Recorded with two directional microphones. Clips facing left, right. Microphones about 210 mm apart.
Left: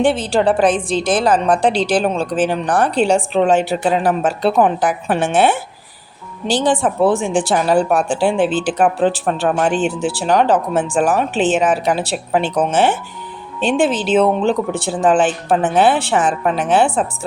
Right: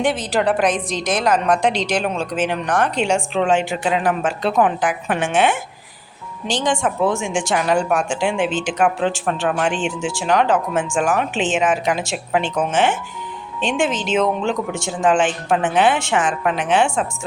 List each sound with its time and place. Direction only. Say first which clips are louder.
0.0 s speech: left 4 dB; 30° left (ahead or behind)